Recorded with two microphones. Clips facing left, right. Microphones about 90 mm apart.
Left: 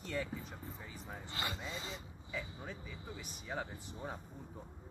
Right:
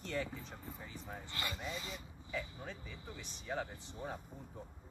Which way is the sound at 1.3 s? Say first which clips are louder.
Left 1 dB; 25° left (ahead or behind).